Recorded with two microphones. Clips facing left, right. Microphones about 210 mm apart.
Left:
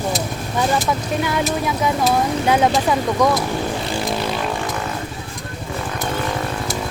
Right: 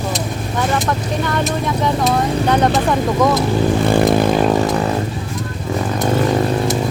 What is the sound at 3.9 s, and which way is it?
Vehicle, 55° right (ahead or behind).